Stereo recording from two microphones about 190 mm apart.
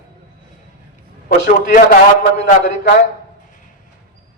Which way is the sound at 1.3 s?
50° left (ahead or behind).